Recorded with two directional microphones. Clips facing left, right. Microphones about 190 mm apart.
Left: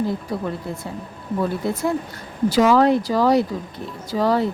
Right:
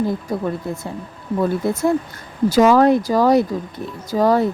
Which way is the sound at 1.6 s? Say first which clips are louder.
Right 4 dB; 45° right (ahead or behind).